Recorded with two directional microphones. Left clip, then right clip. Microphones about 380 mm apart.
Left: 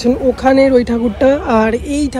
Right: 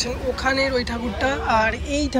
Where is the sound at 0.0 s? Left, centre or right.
Centre.